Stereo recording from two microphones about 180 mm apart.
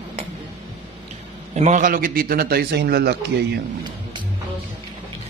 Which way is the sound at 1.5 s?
40° right (ahead or behind).